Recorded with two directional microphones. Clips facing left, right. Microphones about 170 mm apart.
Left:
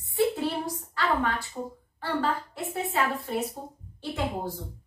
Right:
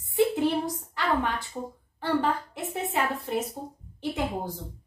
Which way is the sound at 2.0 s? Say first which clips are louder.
Right 2 dB; 20° right (ahead or behind).